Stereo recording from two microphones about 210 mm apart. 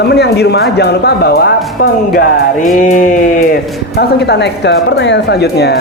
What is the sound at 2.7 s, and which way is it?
A woman's voice, 40° left (ahead or behind).